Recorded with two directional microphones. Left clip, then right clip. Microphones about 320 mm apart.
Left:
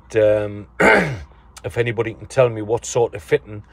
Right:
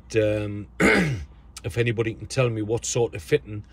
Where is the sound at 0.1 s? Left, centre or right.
Centre.